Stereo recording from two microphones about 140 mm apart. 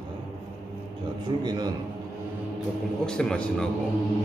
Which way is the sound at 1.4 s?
30° right (ahead or behind).